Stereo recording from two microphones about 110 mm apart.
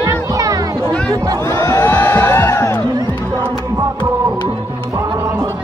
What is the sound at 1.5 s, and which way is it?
Crowd, 30° left (ahead or behind).